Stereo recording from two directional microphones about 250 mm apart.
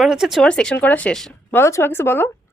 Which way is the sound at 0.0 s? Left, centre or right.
Centre.